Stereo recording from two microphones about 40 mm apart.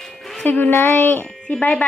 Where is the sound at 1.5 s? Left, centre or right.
Centre.